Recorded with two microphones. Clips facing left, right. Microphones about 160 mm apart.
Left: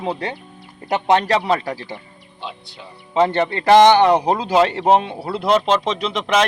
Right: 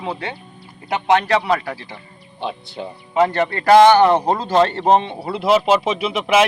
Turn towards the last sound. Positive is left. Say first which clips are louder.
# right 2 dB
turn(degrees=-10)  # may be behind; listen again after turning